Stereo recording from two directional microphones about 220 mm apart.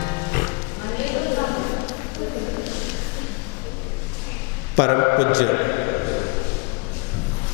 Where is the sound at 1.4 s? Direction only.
20° left (ahead or behind).